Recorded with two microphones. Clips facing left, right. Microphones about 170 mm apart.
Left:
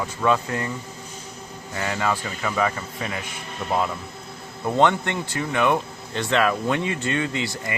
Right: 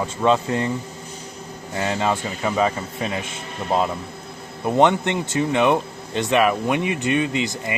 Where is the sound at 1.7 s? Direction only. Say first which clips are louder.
Right 3 dB; 25° right (ahead or behind).